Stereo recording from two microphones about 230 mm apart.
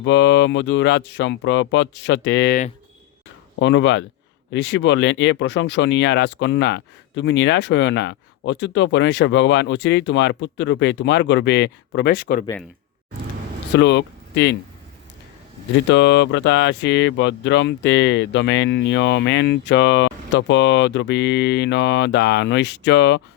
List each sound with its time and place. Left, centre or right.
0.0 s speech: left
3.6 s speech: left
13.7 s speech: left
15.9 s speech: left